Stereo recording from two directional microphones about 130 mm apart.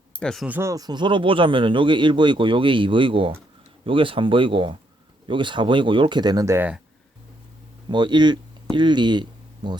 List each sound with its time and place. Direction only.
0.2 s speech: 5° left (ahead or behind)
0.4 s speech: 15° right (ahead or behind)
0.7 s speech: 30° right (ahead or behind)
7.9 s speech: 35° right (ahead or behind)